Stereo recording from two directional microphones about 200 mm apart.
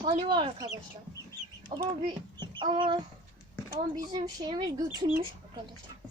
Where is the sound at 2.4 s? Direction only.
25° right (ahead or behind).